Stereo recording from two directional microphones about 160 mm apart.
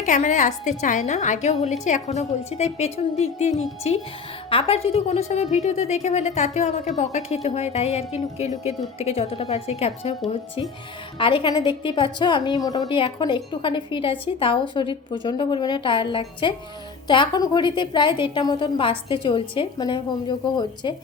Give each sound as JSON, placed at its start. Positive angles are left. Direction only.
{"t": 0.0, "sound": "a woman's voice", "side_deg": 50}
{"t": 11.2, "sound": "a woman's voice", "side_deg": 30}